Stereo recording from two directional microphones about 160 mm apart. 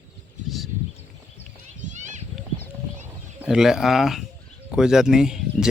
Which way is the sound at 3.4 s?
5° right (ahead or behind).